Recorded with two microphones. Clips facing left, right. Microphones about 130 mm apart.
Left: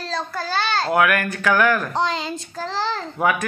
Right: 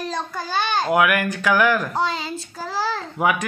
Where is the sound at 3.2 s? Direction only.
15° right (ahead or behind).